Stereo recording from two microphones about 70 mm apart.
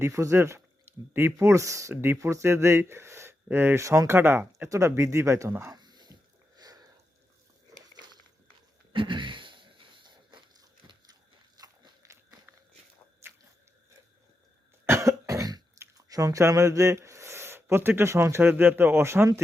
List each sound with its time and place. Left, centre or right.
0.0 s speech: right
3.8 s speech: right
4.9 s speech: right
5.7 s a sound: right
6.6 s a sound: right
7.7 s biting: right
10.0 s biting: right
12.0 s biting: right
13.2 s biting: right
14.8 s cough: right
16.0 s chewing: right
16.5 s speech: right